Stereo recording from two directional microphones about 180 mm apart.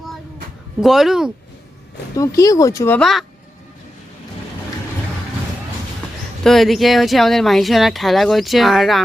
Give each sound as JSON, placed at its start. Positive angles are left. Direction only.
{"t": 0.8, "sound": "speech", "side_deg": 0}
{"t": 2.1, "sound": "speech", "side_deg": 20}
{"t": 3.0, "sound": "speech", "side_deg": 0}
{"t": 6.4, "sound": "speech", "side_deg": 0}